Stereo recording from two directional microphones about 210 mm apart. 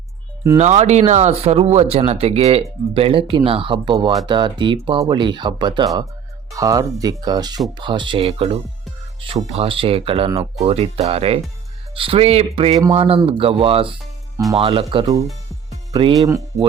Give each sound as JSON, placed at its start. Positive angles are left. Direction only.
{"t": 0.6, "sound": "speech", "side_deg": -35}